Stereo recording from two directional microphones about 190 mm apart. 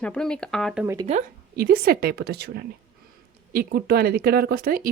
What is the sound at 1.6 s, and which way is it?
A woman's voice, 55° right (ahead or behind).